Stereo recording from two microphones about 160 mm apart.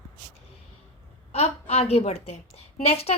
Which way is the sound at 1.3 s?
40° left (ahead or behind).